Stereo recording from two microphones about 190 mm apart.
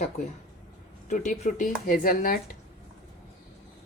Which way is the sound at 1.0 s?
40° left (ahead or behind).